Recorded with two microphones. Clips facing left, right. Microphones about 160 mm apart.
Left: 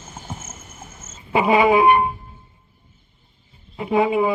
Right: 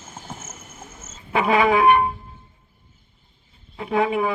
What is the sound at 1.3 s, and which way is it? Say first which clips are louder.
Music: left 3 dB; 20° left (ahead or behind).